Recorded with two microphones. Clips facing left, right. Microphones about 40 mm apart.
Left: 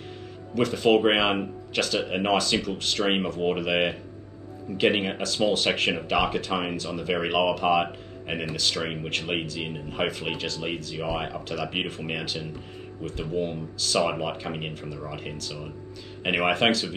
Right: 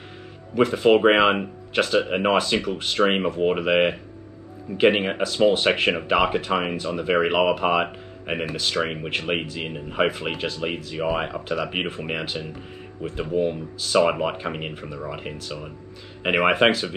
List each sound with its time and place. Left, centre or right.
0.6 s speech: centre